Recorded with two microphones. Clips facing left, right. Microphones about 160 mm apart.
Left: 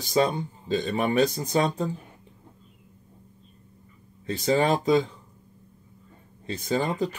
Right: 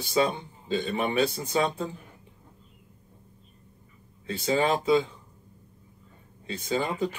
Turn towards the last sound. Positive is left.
turn(degrees=35)  # may be behind; listen again after turning